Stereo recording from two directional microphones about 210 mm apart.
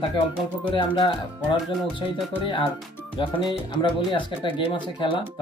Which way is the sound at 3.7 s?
20° left (ahead or behind).